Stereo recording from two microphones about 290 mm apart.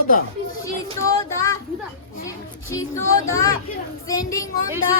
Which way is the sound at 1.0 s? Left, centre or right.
Centre.